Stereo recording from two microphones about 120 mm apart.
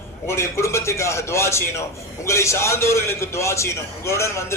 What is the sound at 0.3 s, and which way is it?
A man's voice, 25° left (ahead or behind).